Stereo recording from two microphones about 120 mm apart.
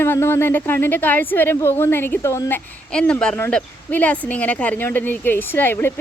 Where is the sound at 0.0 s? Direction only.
20° left (ahead or behind).